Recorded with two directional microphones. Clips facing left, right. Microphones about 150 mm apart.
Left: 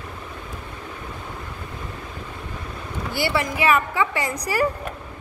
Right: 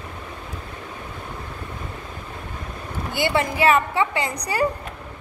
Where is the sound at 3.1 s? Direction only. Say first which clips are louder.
Right 2 dB; 20° right (ahead or behind).